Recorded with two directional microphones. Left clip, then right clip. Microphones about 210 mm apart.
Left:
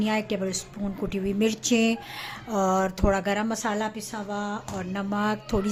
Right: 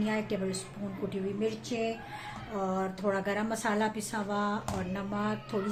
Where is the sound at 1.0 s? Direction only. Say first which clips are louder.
Left 6 dB; 50° left (ahead or behind); by 4.6 s 15° left (ahead or behind).